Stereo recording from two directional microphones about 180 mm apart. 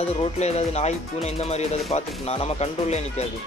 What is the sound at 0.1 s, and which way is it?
Speech, 35° left (ahead or behind).